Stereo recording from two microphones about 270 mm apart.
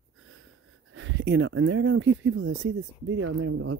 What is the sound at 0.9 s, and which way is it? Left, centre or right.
Speech, right.